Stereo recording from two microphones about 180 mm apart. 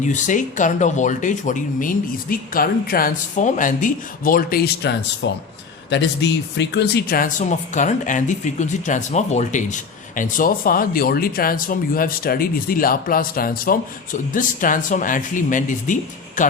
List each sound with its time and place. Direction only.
0.0 s speech: 45° left (ahead or behind)